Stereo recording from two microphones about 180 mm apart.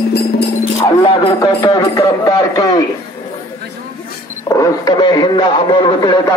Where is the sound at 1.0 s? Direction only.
30° left (ahead or behind).